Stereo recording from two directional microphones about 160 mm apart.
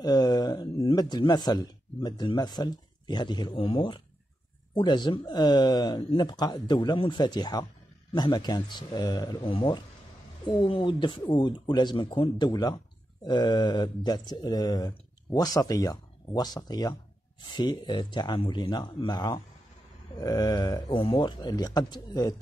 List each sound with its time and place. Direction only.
0.0 s a man's voice: 25° left (ahead or behind)